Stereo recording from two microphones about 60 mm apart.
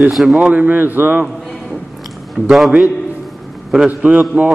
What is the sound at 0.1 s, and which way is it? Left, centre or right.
Speech, centre.